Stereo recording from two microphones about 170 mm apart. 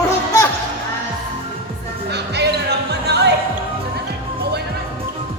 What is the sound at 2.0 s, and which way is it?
Music, 80° right.